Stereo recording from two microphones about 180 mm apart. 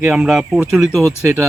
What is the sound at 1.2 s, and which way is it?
Speech, 15° right (ahead or behind).